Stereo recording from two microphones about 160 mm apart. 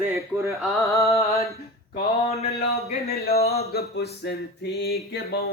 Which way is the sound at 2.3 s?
40° left (ahead or behind).